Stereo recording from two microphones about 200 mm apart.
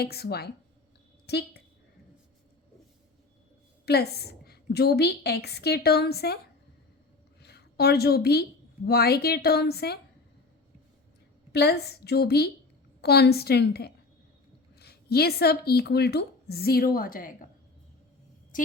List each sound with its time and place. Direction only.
0.0 s a woman's voice: 50° left (ahead or behind)
3.8 s a woman's voice: 55° left (ahead or behind)
7.4 s a woman's voice: 55° left (ahead or behind)
11.5 s a woman's voice: 55° left (ahead or behind)